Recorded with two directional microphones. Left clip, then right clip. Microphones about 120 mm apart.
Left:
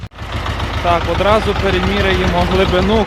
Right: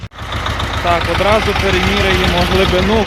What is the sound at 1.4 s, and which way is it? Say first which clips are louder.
Speech: right 2 dB; 75° right (ahead or behind).